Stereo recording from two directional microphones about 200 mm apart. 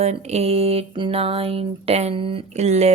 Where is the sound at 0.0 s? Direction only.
35° right (ahead or behind).